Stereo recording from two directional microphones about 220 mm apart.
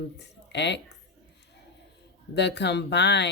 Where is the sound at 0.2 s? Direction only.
50° left (ahead or behind).